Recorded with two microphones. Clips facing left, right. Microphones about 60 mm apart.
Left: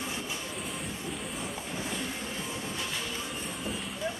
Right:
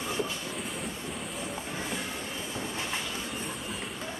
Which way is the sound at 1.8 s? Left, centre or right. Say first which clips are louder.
Left 2 dB; right.